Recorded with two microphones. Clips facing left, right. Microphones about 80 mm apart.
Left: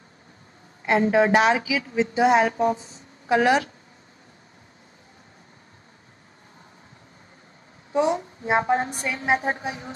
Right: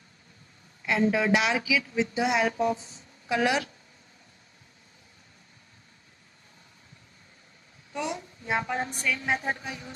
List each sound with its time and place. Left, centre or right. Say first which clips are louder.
0.8 s speech: left 5 dB; left
7.9 s a woman's voice: left 11 dB; left